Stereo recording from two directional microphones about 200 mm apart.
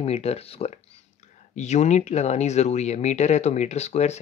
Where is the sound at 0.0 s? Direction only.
30° left (ahead or behind).